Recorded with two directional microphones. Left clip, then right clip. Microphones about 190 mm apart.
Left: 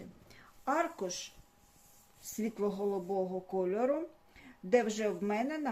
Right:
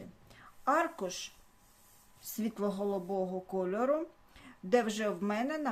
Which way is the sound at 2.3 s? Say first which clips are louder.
Even; 35° right (ahead or behind).